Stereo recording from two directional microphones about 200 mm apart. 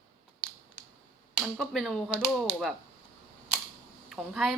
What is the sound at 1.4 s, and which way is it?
Speech, centre (ahead or behind).